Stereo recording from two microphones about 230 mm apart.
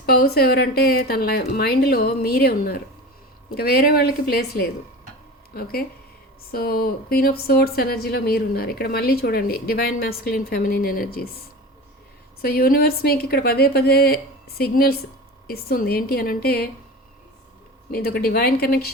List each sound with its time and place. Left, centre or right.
0.0 s a woman's voice: left
12.4 s a woman's voice: left
17.9 s a woman's voice: left